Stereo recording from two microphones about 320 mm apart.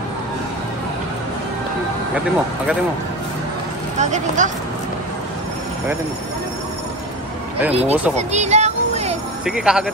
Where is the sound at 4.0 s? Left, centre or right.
Right.